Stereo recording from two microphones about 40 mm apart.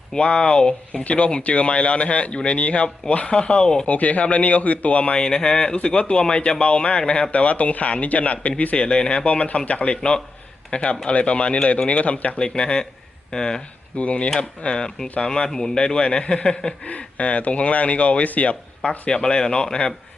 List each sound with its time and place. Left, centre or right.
0.1 s speech: left
3.8 s speech: left
5.2 s speech: centre
12.4 s speech: left
14.0 s speech: left
14.3 s speech: left
16.8 s speech: left